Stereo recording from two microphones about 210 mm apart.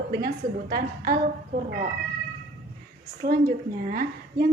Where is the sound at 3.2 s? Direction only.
45° right (ahead or behind).